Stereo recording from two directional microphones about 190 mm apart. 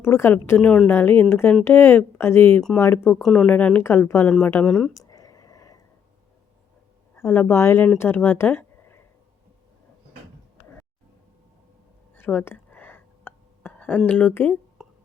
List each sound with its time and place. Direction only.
0.0 s a woman's voice: 10° left (ahead or behind)
4.9 s whispering: 20° left (ahead or behind)
7.2 s speech: 10° left (ahead or behind)
12.1 s a sound: 10° left (ahead or behind)